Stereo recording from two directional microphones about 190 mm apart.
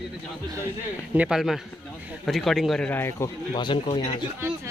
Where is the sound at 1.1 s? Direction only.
5° right (ahead or behind); by 4.1 s 25° left (ahead or behind).